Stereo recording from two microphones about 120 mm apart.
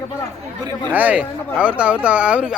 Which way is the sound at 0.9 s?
15° right (ahead or behind).